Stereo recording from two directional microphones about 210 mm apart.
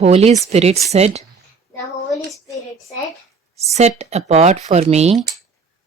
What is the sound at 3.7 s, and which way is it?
Speech, 30° right (ahead or behind).